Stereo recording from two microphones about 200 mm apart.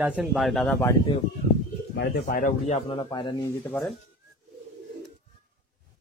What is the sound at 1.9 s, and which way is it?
Speech, 55° left (ahead or behind).